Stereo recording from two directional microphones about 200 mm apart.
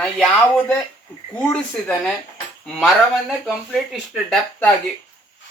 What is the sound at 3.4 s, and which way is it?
Speech, centre (ahead or behind).